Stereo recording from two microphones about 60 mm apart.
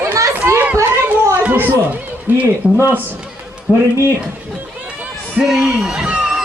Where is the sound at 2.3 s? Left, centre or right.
Right.